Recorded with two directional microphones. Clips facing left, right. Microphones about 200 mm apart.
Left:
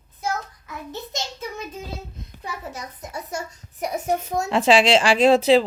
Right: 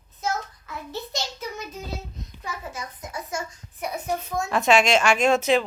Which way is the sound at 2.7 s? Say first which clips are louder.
Left 1 dB; 40° left (ahead or behind).